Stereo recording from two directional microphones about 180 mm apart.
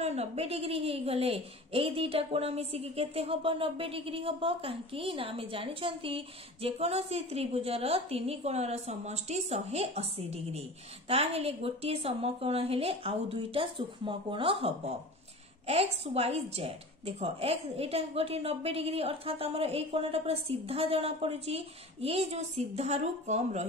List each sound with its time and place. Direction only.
0.0 s a woman's voice: 35° right (ahead or behind)